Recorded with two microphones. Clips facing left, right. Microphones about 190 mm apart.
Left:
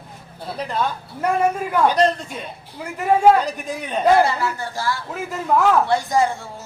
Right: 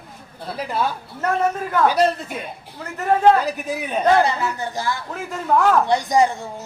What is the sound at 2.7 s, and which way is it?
Speech, 10° left (ahead or behind).